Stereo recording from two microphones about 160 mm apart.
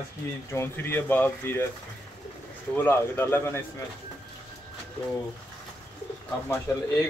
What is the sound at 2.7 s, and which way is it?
Speech, 15° left (ahead or behind).